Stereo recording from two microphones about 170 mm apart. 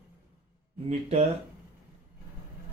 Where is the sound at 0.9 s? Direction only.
40° right (ahead or behind).